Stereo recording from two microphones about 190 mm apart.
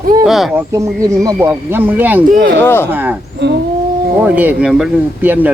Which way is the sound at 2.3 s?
55° right (ahead or behind).